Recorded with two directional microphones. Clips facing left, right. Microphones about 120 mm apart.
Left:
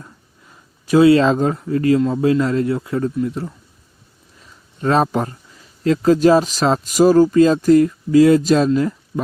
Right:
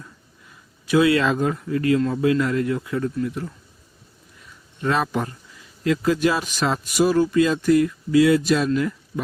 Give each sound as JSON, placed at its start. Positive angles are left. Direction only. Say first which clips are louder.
{"t": 0.9, "sound": "a man's voice", "louder": "left 6 dB", "side_deg": 30}